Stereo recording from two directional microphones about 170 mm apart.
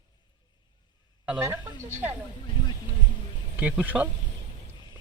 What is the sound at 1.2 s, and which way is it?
Speech, 10° right (ahead or behind).